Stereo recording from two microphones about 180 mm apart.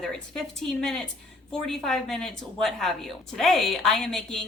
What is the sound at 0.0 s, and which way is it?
A woman's voice, 5° left (ahead or behind).